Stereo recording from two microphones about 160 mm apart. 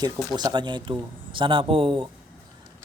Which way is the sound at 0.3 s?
25° right (ahead or behind).